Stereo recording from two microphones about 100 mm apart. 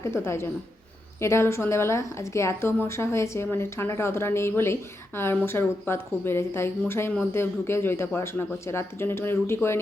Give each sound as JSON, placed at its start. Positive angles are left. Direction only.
{"t": 0.0, "sound": "a woman's voice", "side_deg": 25}